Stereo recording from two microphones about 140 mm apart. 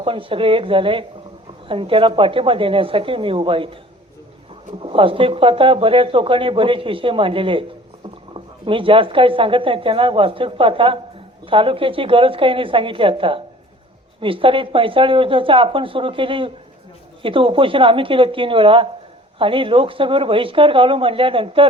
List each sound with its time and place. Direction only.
0.0 s speech: 40° right (ahead or behind)
4.8 s speech: 40° right (ahead or behind)